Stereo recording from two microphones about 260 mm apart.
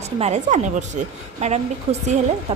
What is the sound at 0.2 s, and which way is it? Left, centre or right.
A woman's voice, right.